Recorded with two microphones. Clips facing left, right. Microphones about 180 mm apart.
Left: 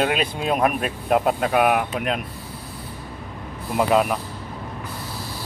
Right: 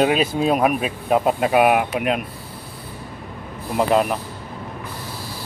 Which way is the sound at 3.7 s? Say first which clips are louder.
Right 1 dB; centre (ahead or behind).